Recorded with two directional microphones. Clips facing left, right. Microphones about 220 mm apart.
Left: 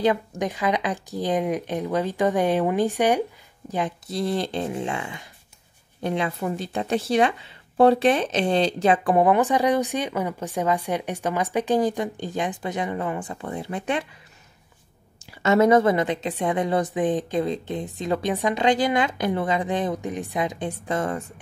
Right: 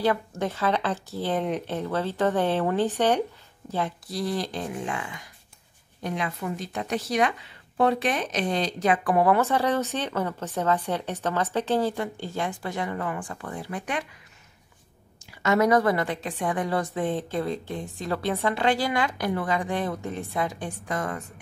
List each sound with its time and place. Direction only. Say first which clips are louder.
0.0 s speech: left 3 dB; 15° left (ahead or behind)
15.4 s speech: left 4 dB; 25° left (ahead or behind)